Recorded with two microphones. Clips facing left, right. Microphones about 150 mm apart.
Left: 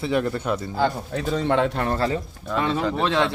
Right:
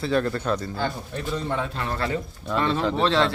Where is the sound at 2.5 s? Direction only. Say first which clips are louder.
Even; 5° left (ahead or behind).